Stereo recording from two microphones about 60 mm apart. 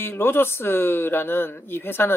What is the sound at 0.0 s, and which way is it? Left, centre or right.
Speech, left.